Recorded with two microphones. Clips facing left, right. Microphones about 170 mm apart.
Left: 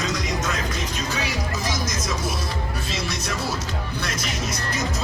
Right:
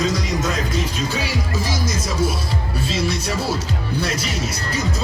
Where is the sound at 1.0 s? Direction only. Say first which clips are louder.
Right 3 dB; 30° right (ahead or behind).